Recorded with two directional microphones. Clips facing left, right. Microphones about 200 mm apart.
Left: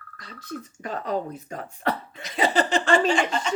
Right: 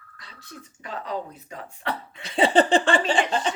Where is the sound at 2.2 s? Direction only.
30° right (ahead or behind).